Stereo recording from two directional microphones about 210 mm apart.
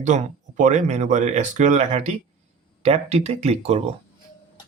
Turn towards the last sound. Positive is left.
turn(degrees=-30)  # may be behind; listen again after turning